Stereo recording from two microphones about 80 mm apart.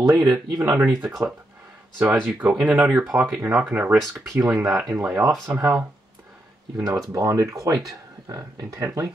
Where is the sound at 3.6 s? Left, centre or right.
Right.